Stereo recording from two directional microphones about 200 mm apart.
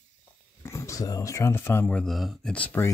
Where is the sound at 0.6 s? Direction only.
15° left (ahead or behind).